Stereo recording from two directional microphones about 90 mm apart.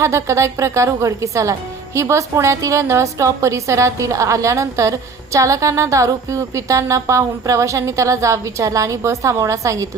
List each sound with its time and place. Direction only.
0.0 s a woman's voice: 35° right (ahead or behind)